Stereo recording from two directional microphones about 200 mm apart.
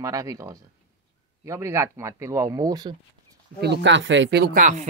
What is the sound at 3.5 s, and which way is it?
Speech, 55° right (ahead or behind).